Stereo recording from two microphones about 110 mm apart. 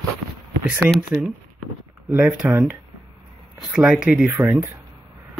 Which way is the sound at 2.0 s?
10° right (ahead or behind).